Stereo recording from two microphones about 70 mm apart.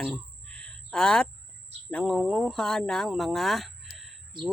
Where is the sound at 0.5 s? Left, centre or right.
Centre.